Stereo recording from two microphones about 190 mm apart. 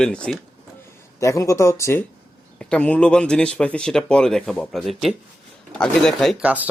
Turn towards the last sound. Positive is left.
turn(degrees=-5)  # may be behind; listen again after turning